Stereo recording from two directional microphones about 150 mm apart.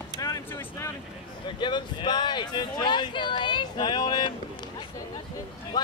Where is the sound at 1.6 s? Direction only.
30° left (ahead or behind).